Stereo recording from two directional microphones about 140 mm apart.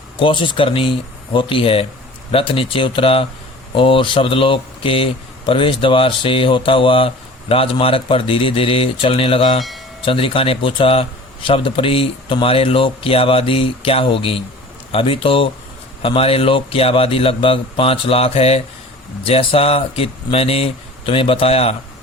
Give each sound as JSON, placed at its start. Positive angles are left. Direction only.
{"t": 0.2, "sound": "speech", "side_deg": 35}
{"t": 9.6, "sound": "speech", "side_deg": 0}
{"t": 10.1, "sound": "a man's voice", "side_deg": 40}